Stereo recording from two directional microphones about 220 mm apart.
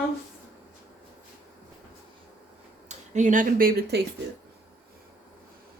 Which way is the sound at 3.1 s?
35° right (ahead or behind).